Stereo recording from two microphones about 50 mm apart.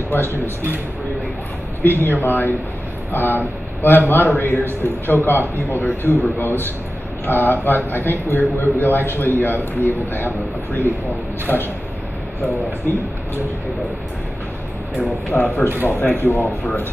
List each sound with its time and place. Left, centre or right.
0.1 s speech: left
1.8 s speech: left
11.5 s speech: left
15.3 s a man's voice: centre
15.9 s speech: left